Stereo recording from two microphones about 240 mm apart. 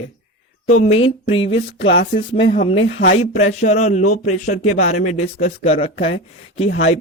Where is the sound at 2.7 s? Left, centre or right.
Left.